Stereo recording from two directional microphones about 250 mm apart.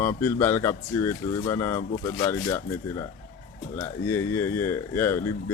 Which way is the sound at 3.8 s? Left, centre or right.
Centre.